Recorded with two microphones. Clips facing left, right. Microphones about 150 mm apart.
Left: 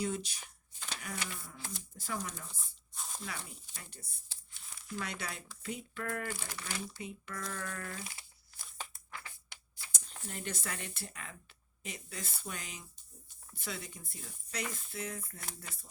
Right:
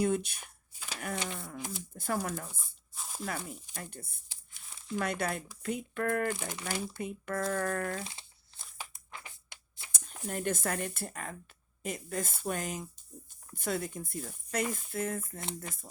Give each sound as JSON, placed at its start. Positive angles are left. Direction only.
{"t": 0.0, "sound": "speech", "side_deg": -55}
{"t": 0.7, "sound": "shuffling cards", "side_deg": -10}
{"t": 1.1, "sound": "a sound", "side_deg": -25}
{"t": 1.9, "sound": "speech", "side_deg": -55}
{"t": 2.9, "sound": "a sound", "side_deg": -5}
{"t": 3.2, "sound": "speech", "side_deg": -50}
{"t": 4.3, "sound": "crumpling", "side_deg": -25}
{"t": 4.9, "sound": "speech", "side_deg": -50}
{"t": 6.3, "sound": "speech", "side_deg": -20}
{"t": 6.9, "sound": "speech", "side_deg": -55}
{"t": 8.0, "sound": "crumpling", "side_deg": -25}
{"t": 8.8, "sound": "a sound", "side_deg": -20}
{"t": 9.9, "sound": "speech", "side_deg": -50}
{"t": 15.4, "sound": "speech", "side_deg": -20}